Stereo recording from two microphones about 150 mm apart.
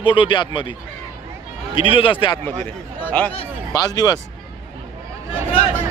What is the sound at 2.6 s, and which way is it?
Speech, 10° left (ahead or behind).